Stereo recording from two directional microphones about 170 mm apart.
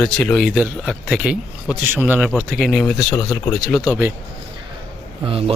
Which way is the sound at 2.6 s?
5° left (ahead or behind).